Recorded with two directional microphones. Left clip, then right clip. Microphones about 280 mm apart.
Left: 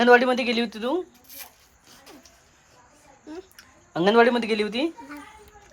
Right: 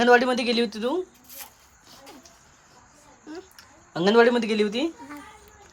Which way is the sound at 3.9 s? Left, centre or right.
Centre.